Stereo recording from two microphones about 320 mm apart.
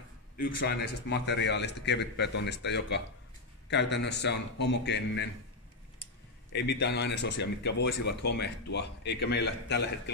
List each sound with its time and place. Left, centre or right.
0.6 s speech: left
6.5 s speech: left